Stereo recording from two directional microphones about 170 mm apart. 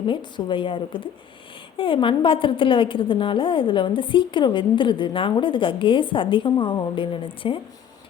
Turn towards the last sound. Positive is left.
turn(degrees=30)  # may be behind; listen again after turning